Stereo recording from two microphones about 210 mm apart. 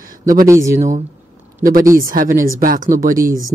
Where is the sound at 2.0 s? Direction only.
40° right (ahead or behind).